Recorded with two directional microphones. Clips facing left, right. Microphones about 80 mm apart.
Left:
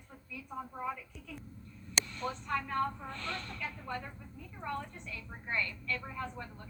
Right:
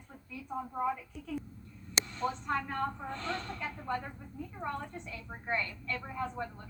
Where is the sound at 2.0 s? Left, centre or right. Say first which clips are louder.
Right 4 dB; right.